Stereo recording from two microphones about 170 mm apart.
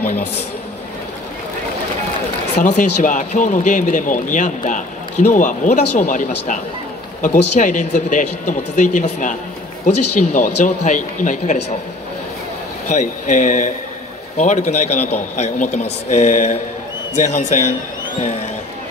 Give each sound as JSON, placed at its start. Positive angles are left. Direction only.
{"t": 2.5, "sound": "speech", "side_deg": 45}
{"t": 12.8, "sound": "a man's voice", "side_deg": 45}